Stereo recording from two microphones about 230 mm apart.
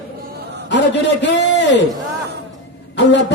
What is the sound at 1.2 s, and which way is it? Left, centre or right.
Speech, left.